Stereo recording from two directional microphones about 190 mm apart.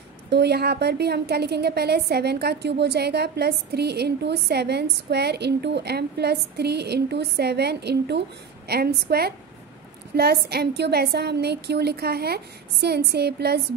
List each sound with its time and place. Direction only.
0.3 s a woman's voice: 60° right (ahead or behind)
10.1 s a woman's voice: 55° right (ahead or behind)